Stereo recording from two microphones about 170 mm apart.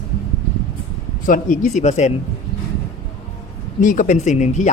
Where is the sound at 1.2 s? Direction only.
50° left (ahead or behind).